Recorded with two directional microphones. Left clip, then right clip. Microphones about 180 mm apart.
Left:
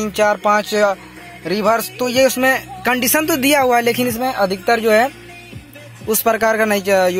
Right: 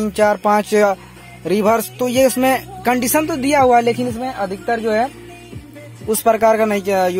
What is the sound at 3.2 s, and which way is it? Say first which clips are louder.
A woman's voice: right 1 dB; centre (ahead or behind).